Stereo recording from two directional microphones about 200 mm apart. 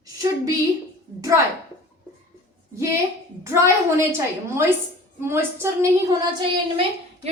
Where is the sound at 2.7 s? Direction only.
15° right (ahead or behind).